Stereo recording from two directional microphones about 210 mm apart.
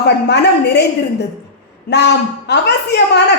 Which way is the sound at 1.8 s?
55° left (ahead or behind).